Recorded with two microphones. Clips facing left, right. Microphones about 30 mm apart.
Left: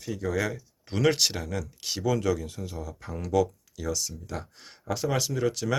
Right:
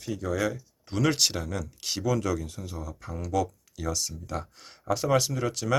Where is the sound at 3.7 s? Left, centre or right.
Centre.